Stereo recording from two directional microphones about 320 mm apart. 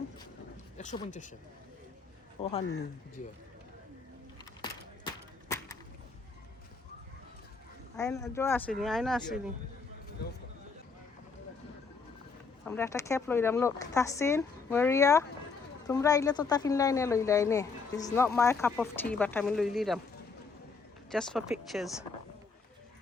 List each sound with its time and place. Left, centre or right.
0.8 s speech: left
2.4 s speech: centre
4.6 s a sound: centre
7.9 s speech: centre
12.6 s speech: centre
21.1 s speech: centre